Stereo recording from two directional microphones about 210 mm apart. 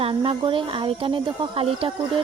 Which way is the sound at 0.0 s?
25° right (ahead or behind).